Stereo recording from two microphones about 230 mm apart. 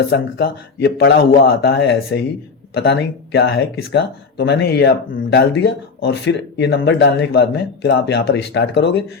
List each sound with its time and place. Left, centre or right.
0.0 s speech: left